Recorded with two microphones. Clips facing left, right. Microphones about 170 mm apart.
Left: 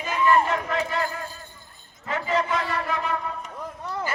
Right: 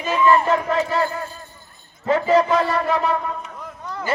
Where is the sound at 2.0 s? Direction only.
35° right (ahead or behind).